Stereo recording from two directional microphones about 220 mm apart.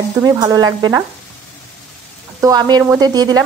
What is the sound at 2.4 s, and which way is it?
A woman's voice, 20° right (ahead or behind).